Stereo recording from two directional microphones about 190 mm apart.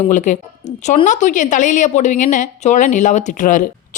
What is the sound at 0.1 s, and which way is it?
A woman's voice, 40° left (ahead or behind).